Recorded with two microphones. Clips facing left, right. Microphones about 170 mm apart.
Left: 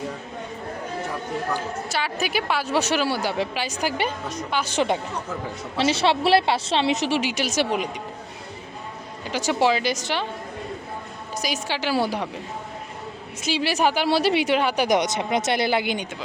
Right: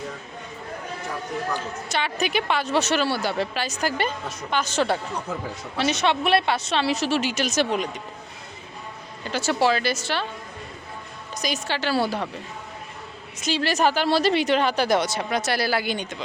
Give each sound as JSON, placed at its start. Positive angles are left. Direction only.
{"t": 1.5, "sound": "speech", "side_deg": 5}
{"t": 5.7, "sound": "a woman's voice", "side_deg": 30}
{"t": 9.2, "sound": "speech", "side_deg": 15}
{"t": 11.3, "sound": "speech", "side_deg": 10}
{"t": 13.4, "sound": "speech", "side_deg": 10}